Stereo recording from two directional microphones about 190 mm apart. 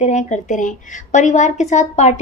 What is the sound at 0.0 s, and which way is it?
A woman's voice, 35° left (ahead or behind).